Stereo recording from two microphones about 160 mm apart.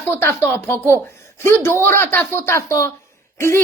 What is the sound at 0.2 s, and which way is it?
A woman's voice, 15° left (ahead or behind).